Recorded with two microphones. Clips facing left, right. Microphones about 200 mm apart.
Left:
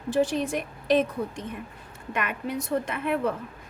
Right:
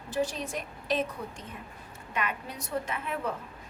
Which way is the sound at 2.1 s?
55° left (ahead or behind).